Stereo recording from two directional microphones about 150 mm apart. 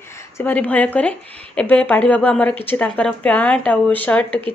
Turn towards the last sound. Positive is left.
turn(degrees=10)  # may be behind; listen again after turning